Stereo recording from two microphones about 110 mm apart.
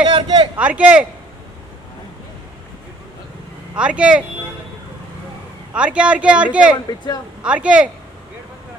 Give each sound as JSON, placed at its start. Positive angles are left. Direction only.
{"t": 0.0, "sound": "speech", "side_deg": -60}
{"t": 0.6, "sound": "speech", "side_deg": -10}
{"t": 3.7, "sound": "speech", "side_deg": -10}
{"t": 5.7, "sound": "speech", "side_deg": -10}